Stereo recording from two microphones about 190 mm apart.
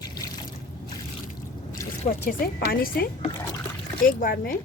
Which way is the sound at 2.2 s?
50° left (ahead or behind).